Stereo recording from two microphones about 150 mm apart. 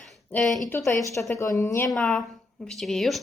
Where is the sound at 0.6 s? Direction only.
20° left (ahead or behind).